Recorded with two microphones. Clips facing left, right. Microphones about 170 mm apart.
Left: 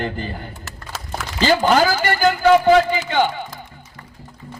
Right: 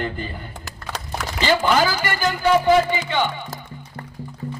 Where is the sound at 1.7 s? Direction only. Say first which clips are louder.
Left 3 dB; 45° left (ahead or behind).